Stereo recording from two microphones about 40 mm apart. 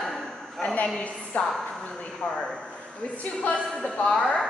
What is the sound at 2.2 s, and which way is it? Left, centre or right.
Speech, centre.